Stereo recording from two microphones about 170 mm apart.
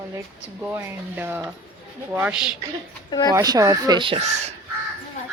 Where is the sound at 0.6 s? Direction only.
10° right (ahead or behind).